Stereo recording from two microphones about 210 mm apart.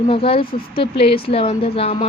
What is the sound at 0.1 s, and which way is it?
A woman's voice, 25° left (ahead or behind).